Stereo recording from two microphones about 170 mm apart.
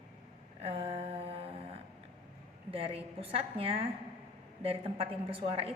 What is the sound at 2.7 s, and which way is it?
A woman's voice, 35° right (ahead or behind).